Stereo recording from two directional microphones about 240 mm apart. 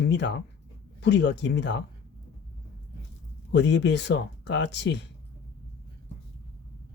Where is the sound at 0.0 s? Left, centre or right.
Left.